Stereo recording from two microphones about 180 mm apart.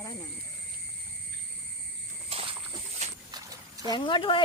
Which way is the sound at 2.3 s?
30° right (ahead or behind).